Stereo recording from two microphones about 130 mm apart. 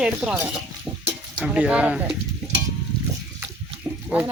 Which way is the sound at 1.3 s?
10° right (ahead or behind).